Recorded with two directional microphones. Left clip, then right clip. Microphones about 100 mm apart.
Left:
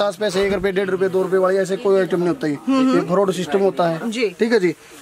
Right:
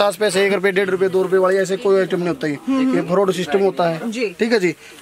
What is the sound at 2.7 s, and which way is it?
Speech, 45° left (ahead or behind).